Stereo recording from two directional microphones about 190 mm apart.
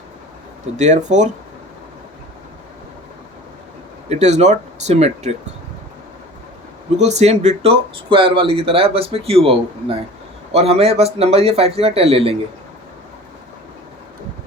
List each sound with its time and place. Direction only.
0.8 s speech: 40° right (ahead or behind)
4.1 s speech: 35° right (ahead or behind)
7.0 s speech: 35° right (ahead or behind)